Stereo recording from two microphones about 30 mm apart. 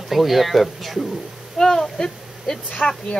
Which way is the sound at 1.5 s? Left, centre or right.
Centre.